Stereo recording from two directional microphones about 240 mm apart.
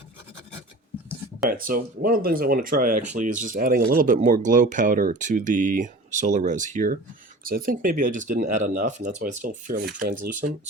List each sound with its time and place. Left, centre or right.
1.5 s speech: right